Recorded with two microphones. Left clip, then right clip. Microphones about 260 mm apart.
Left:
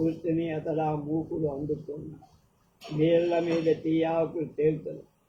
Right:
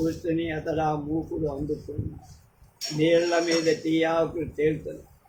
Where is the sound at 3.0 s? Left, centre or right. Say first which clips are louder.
Right 2 dB; right.